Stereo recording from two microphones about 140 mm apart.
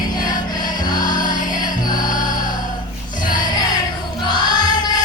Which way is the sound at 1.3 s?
30° left (ahead or behind).